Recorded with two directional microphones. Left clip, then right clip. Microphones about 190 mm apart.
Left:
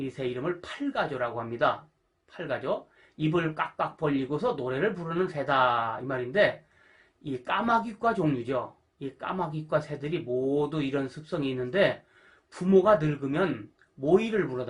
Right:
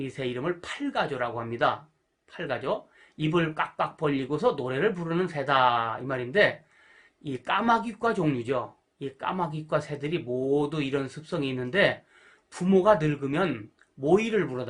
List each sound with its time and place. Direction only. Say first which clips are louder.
0.0 s speech: right 1 dB; 40° right (ahead or behind)